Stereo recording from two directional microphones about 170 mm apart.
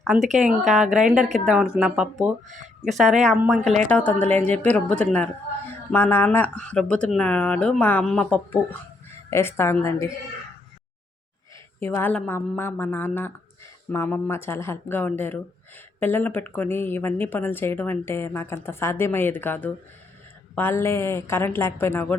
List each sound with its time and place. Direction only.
0.2 s speech: 45° right (ahead or behind)
0.7 s speech: centre (ahead or behind)
3.3 s speech: 5° right (ahead or behind); by 10.1 s 15° left (ahead or behind)
11.9 s speech: 10° left (ahead or behind)